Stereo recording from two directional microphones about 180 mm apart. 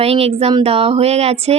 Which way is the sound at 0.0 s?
35° right (ahead or behind).